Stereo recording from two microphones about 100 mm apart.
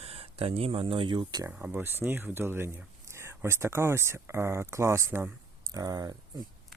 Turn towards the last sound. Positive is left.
turn(degrees=-40)  # may be behind; listen again after turning